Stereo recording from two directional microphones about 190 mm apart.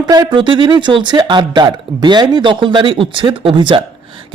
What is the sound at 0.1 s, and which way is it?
Speech, 20° right (ahead or behind).